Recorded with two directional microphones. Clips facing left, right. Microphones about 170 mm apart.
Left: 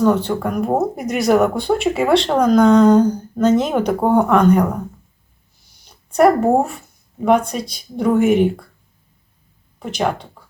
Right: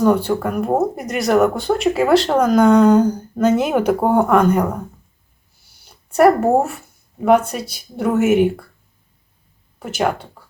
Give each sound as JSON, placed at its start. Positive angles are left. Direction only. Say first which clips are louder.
{"t": 0.0, "sound": "speech", "louder": "right 1 dB", "side_deg": -10}
{"t": 5.8, "sound": "speech", "louder": "right 1 dB", "side_deg": -5}
{"t": 9.8, "sound": "speech", "louder": "right 1 dB", "side_deg": -5}